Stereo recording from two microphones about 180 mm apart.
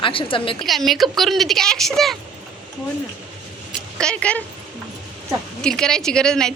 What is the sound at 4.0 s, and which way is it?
Speech, 5° left (ahead or behind).